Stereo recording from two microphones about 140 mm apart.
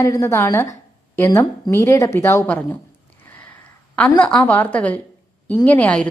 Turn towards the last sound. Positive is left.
turn(degrees=10)  # may be behind; listen again after turning